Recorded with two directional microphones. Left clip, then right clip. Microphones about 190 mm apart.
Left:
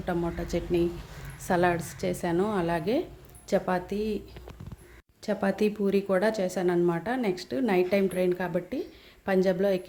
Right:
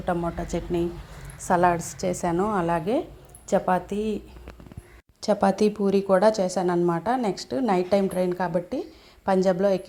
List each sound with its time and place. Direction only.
0.0 s a woman's voice: centre (ahead or behind)
5.2 s a woman's voice: 15° right (ahead or behind)